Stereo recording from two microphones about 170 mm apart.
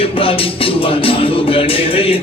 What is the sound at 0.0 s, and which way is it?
Music, 35° left (ahead or behind).